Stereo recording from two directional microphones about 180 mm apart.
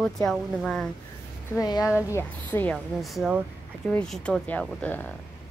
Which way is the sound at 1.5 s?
20° left (ahead or behind).